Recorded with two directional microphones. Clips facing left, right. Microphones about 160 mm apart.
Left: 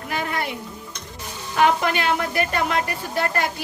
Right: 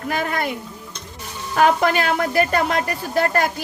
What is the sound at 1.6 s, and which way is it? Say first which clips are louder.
A woman's voice: right 3 dB; 40° right (ahead or behind).